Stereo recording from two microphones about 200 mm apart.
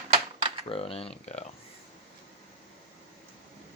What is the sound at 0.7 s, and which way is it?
Speech, 30° left (ahead or behind).